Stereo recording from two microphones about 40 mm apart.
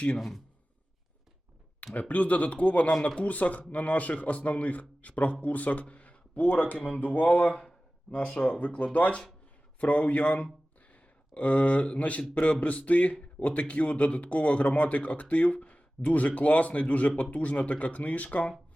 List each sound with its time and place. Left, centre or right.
0.2 s speech: centre
1.9 s speech: left
6.7 s a sound: left
8.1 s speech: left